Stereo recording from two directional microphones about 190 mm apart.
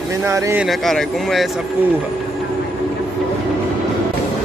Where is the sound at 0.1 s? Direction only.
15° right (ahead or behind).